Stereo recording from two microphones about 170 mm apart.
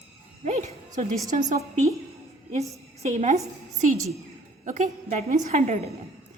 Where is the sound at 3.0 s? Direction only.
45° right (ahead or behind).